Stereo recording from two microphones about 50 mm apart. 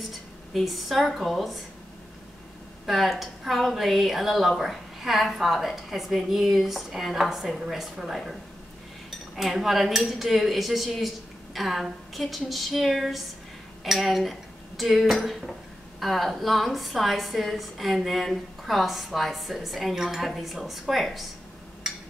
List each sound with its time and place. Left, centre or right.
0.5 s a woman's voice: centre
2.9 s a woman's voice: centre
9.4 s a woman's voice: centre
21.8 s a sound: centre